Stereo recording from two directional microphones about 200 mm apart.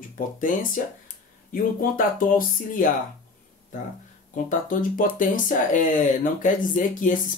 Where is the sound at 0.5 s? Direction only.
40° left (ahead or behind).